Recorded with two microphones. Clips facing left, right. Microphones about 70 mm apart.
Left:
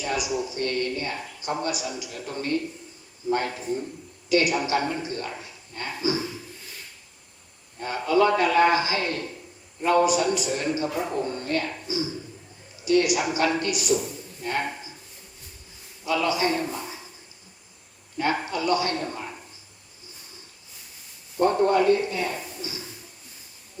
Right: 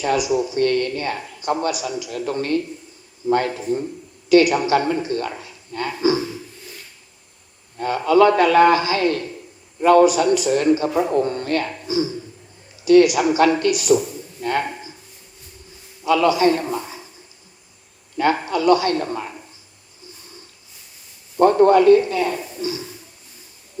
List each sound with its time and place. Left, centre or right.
0.0 s speech: right
7.8 s speech: right
16.0 s speech: right
18.2 s speech: right
21.3 s a man's voice: right